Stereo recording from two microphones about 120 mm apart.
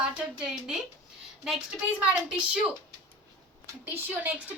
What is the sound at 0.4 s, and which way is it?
Speech, 5° right (ahead or behind).